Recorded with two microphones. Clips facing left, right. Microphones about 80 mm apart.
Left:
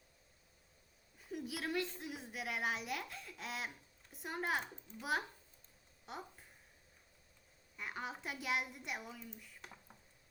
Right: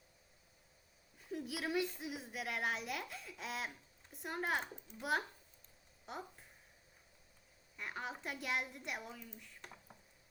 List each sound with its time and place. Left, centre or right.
1.2 s a woman's voice: centre
7.8 s a woman's voice: centre